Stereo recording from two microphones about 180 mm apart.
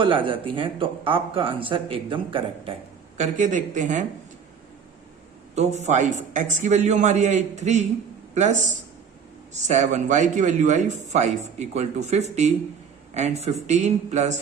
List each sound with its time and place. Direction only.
0.0 s speech: 30° right (ahead or behind)
3.2 s speech: 45° right (ahead or behind)
5.8 s speech: 40° right (ahead or behind)